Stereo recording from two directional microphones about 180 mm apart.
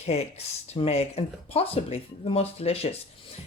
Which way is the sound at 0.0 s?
35° left (ahead or behind).